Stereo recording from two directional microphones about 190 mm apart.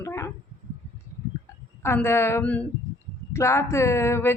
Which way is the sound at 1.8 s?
10° left (ahead or behind).